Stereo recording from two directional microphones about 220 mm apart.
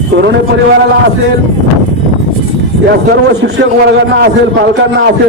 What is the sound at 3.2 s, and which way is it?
A man's voice, 50° right (ahead or behind).